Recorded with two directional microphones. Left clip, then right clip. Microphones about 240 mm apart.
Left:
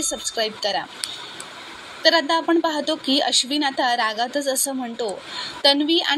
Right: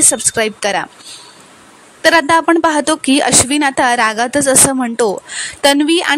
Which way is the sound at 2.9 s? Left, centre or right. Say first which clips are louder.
Right 7 dB; right.